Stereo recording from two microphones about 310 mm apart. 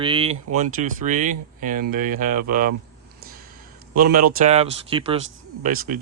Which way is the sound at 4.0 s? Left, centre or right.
Right.